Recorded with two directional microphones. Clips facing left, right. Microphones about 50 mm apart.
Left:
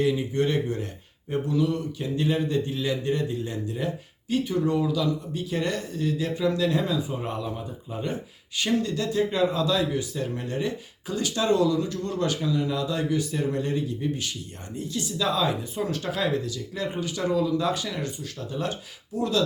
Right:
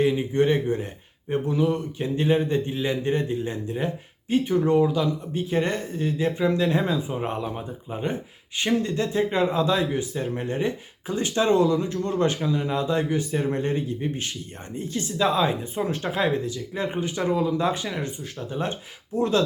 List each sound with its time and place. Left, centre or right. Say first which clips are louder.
0.0 s speech: right 3 dB; right